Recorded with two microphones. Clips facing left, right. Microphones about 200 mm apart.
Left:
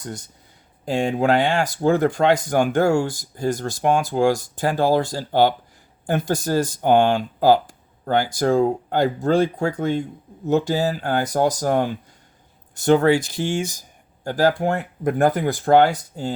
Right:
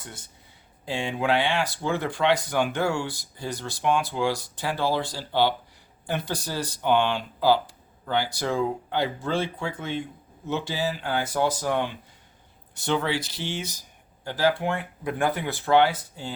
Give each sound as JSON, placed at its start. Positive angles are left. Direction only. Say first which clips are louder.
{"t": 0.0, "sound": "speech", "louder": "left 10 dB", "side_deg": 40}